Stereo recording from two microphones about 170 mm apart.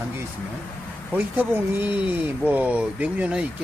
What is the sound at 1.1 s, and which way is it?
Speech, 10° right (ahead or behind).